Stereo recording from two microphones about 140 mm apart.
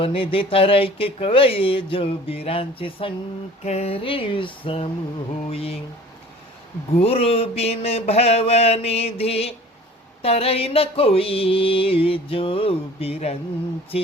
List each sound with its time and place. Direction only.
0.0 s speech: 40° left (ahead or behind)
5.5 s music: 45° left (ahead or behind)
7.0 s music: 45° left (ahead or behind)